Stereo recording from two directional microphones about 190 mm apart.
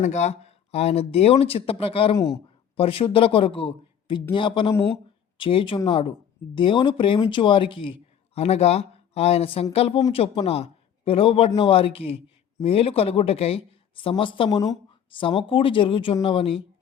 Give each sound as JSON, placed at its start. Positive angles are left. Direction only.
{"t": 0.0, "sound": "speech", "side_deg": 40}